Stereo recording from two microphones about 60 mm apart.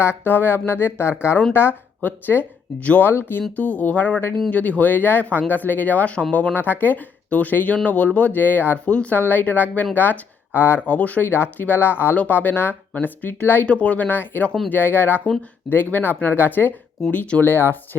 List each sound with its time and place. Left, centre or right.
0.0 s speech: left
8.9 s speech: centre
9.1 s speech: left
10.8 s speech: left
12.1 s speech: left
13.7 s speech: left
17.1 s speech: left
17.4 s speech: left